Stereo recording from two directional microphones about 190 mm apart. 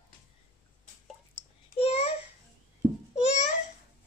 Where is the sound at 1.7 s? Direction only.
35° left (ahead or behind).